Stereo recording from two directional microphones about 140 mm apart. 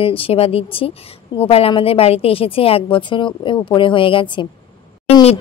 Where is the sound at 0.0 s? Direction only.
40° left (ahead or behind).